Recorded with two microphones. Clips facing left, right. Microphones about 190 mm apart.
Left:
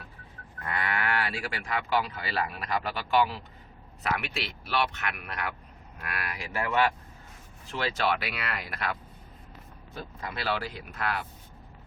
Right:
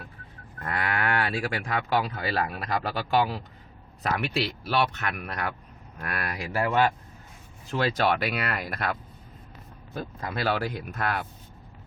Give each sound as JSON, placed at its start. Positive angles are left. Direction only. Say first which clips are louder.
{"t": 0.7, "sound": "speech", "louder": "right 3 dB", "side_deg": -45}